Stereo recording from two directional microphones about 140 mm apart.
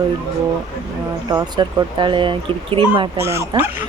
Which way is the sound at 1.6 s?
35° right (ahead or behind).